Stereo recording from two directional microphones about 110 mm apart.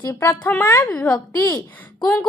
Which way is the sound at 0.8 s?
10° left (ahead or behind).